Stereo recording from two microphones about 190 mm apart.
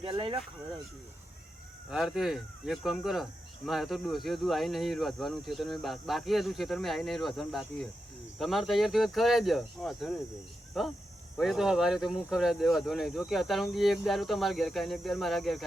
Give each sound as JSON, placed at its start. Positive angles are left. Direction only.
{"t": 0.0, "sound": "speech", "side_deg": -25}
{"t": 1.9, "sound": "speech", "side_deg": 0}